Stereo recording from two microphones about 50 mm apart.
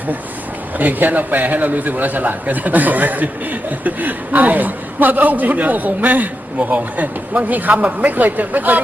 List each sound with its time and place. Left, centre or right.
0.8 s a man's voice: right